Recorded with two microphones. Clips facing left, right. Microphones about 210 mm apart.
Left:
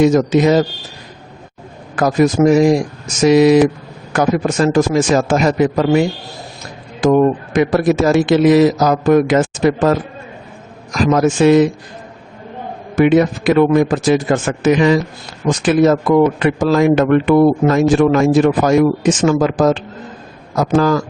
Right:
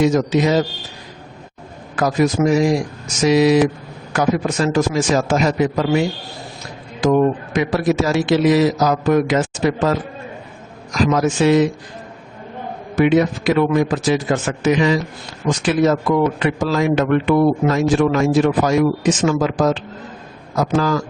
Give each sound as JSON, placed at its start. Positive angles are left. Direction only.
{"t": 0.0, "sound": "speech", "side_deg": 50}
{"t": 2.0, "sound": "speech", "side_deg": 45}
{"t": 11.0, "sound": "speech", "side_deg": 50}
{"t": 13.0, "sound": "speech", "side_deg": 55}